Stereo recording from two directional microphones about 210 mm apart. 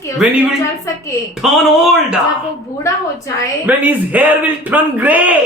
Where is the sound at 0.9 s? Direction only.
15° left (ahead or behind).